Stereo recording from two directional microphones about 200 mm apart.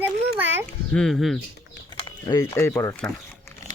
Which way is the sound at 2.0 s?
20° left (ahead or behind).